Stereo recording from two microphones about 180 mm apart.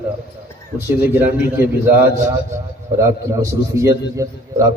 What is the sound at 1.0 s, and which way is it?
A man's voice, 10° right (ahead or behind).